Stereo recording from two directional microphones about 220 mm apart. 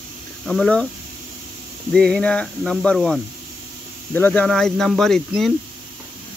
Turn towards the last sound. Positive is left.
turn(degrees=0)  # may be behind; listen again after turning